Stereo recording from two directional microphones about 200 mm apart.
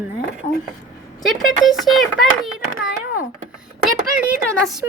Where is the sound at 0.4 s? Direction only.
40° left (ahead or behind).